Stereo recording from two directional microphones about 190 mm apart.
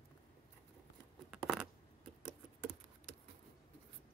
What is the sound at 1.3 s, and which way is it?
Coin, 5° right (ahead or behind).